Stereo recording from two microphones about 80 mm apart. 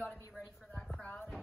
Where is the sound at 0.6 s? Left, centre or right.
Centre.